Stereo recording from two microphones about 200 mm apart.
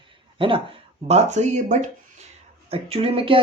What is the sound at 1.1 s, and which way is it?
Speech, 35° right (ahead or behind).